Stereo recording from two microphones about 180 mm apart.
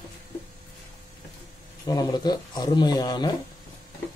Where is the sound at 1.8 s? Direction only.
20° left (ahead or behind).